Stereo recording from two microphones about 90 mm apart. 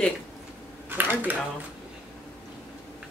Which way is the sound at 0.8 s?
20° right (ahead or behind).